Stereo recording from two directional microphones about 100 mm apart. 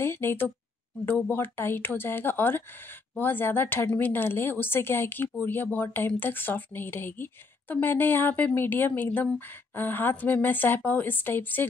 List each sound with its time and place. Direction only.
0.0 s speech: 25° left (ahead or behind)